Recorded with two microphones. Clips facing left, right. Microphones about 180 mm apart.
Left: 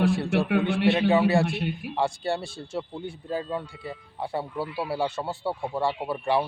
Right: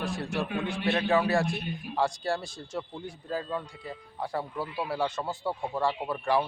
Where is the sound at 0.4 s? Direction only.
70° left (ahead or behind).